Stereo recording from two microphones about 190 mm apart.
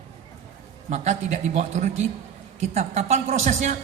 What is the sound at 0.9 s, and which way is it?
A man's voice, 35° right (ahead or behind).